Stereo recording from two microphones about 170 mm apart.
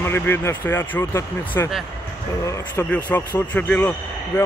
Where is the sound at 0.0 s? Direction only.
15° left (ahead or behind).